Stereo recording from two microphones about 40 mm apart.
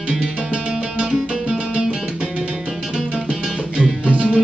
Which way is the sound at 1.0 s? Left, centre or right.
Centre.